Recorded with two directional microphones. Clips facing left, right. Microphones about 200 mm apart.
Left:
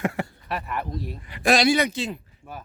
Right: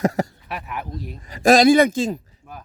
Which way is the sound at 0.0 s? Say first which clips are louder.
Right 6 dB; 40° right (ahead or behind).